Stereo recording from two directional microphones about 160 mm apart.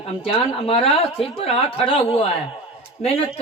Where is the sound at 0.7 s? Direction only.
35° left (ahead or behind).